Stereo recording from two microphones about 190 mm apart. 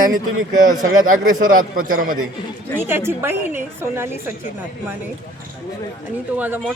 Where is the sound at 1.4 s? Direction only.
45° right (ahead or behind).